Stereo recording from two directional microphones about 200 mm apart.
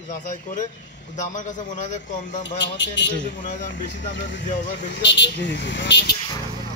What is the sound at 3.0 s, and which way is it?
Speech, 65° left (ahead or behind).